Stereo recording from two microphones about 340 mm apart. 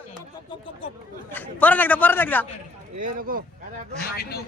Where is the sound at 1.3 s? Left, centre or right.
Centre.